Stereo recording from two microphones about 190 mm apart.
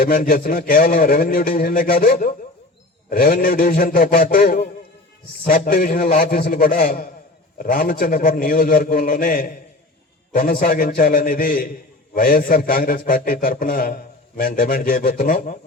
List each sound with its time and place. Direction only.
0.0 s a man's voice: 50° left (ahead or behind)